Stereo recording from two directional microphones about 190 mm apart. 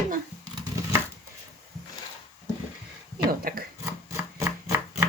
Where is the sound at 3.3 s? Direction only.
50° right (ahead or behind).